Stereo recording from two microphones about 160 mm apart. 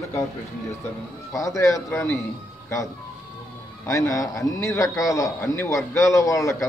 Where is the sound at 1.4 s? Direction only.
20° left (ahead or behind).